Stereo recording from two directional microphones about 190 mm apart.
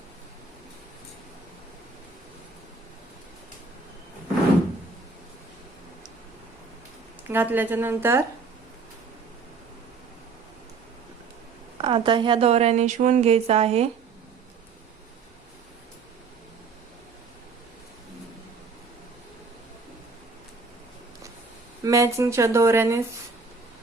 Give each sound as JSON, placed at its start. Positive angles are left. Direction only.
{"t": 7.3, "sound": "speech", "side_deg": -10}
{"t": 11.8, "sound": "a woman's voice", "side_deg": -30}
{"t": 21.8, "sound": "speech", "side_deg": -15}